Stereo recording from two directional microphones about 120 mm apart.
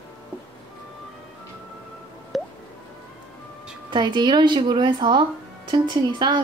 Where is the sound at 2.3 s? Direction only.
Centre (ahead or behind).